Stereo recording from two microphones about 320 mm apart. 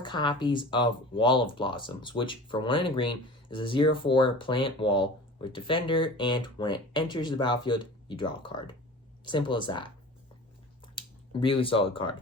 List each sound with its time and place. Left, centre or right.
0.0 s speech: centre
10.9 s speech: centre